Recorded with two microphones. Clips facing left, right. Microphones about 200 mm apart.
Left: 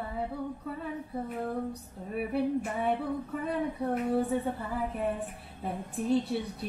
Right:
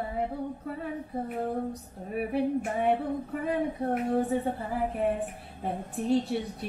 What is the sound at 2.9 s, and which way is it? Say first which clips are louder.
A woman's voice: right 2 dB; 35° right (ahead or behind).